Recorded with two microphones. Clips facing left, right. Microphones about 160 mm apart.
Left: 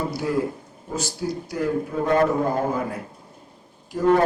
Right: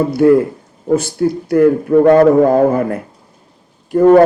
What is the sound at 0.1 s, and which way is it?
A man's voice, 60° right (ahead or behind).